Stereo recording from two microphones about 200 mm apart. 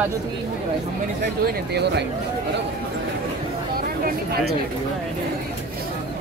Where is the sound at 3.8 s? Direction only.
50° right (ahead or behind).